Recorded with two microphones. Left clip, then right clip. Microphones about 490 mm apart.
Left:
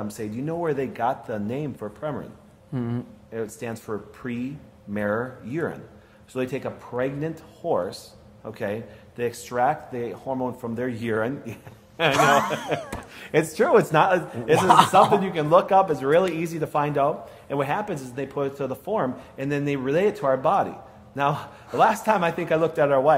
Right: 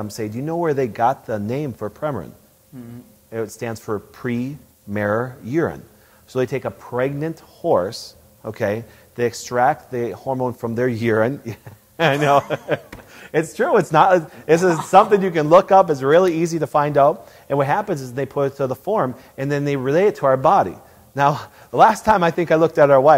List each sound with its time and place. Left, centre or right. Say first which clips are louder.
0.1 s speech: right 5 dB; right
3.3 s speech: right 6 dB; right
13.1 s speech: right 2 dB; right
13.9 s a man's voice: right 6 dB; right
14.4 s speech: left 1 dB; right